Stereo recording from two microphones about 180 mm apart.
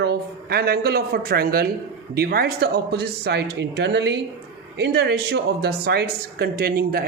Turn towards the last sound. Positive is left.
turn(degrees=-55)  # may be behind; listen again after turning